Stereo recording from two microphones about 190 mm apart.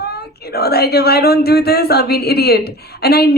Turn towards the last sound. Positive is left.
turn(degrees=55)  # may be behind; listen again after turning